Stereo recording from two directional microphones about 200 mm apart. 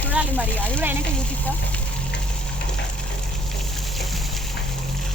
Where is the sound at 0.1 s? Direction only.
5° right (ahead or behind).